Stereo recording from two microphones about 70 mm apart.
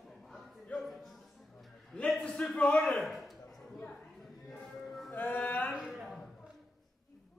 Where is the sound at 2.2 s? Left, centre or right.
Centre.